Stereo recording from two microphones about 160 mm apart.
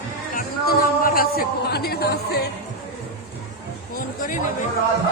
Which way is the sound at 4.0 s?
60° left (ahead or behind).